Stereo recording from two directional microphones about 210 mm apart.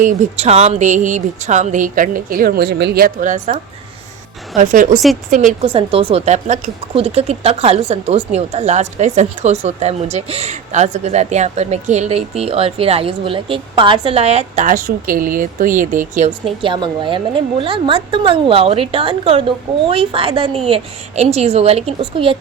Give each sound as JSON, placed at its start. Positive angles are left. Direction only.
{"t": 0.0, "sound": "a woman's voice", "side_deg": -35}
{"t": 16.6, "sound": "speech", "side_deg": -20}